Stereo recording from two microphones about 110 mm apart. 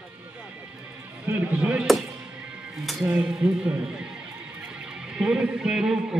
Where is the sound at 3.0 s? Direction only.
10° right (ahead or behind).